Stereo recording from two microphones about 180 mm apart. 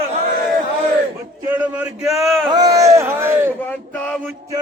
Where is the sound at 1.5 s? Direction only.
10° right (ahead or behind).